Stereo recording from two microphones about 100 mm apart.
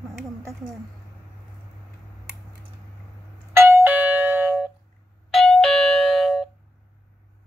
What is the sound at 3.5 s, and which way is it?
Doorbell, 20° right (ahead or behind).